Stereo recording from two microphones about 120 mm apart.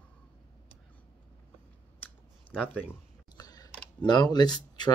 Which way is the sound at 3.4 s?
35° left (ahead or behind).